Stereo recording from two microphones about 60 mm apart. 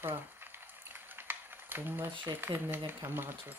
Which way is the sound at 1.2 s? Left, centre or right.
Right.